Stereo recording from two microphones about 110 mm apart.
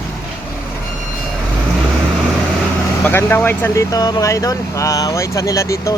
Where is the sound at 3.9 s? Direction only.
35° left (ahead or behind).